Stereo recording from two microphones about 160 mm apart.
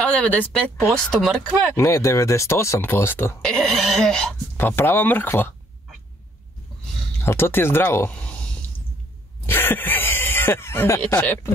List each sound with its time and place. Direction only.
0.0 s speech: 10° left (ahead or behind)
1.8 s speech: 20° left (ahead or behind)
3.5 s speech: centre (ahead or behind)
7.2 s speech: 15° left (ahead or behind)
9.5 s speech: 15° left (ahead or behind)